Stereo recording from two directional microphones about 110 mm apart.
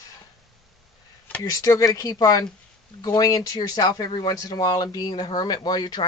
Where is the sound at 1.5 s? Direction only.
35° left (ahead or behind).